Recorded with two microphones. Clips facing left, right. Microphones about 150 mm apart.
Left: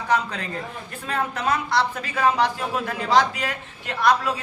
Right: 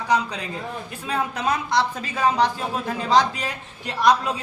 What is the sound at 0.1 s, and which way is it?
A woman's voice, 15° right (ahead or behind).